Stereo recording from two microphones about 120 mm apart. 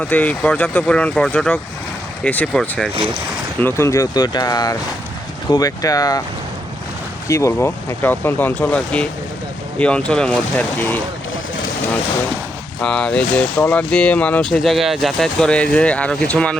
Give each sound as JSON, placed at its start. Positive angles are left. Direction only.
{"t": 0.0, "sound": "speech", "side_deg": 10}
{"t": 3.6, "sound": "speech", "side_deg": 20}
{"t": 7.3, "sound": "speech", "side_deg": 25}
{"t": 12.8, "sound": "speech", "side_deg": 10}
{"t": 14.6, "sound": "speech", "side_deg": 0}